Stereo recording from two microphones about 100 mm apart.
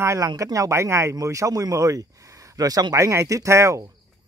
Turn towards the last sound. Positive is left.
turn(degrees=-30)  # may be behind; listen again after turning